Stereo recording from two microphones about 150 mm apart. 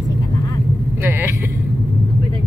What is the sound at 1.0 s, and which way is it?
Vehicle, 15° right (ahead or behind).